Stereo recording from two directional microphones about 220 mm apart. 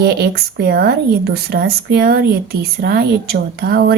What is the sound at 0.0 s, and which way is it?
A woman's voice, 45° right (ahead or behind).